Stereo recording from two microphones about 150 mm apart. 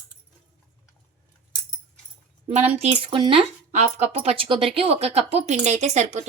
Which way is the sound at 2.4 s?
45° right (ahead or behind).